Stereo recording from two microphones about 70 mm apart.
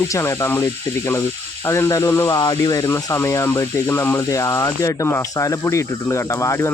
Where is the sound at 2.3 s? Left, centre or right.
Left.